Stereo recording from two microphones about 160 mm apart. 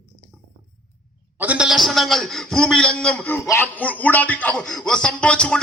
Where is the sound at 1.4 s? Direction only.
5° right (ahead or behind).